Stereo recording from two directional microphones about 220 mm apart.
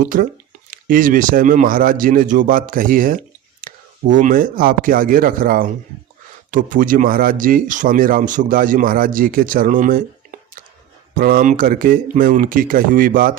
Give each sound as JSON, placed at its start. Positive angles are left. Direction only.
{"t": 0.0, "sound": "speech", "side_deg": -40}
{"t": 11.1, "sound": "speech", "side_deg": -40}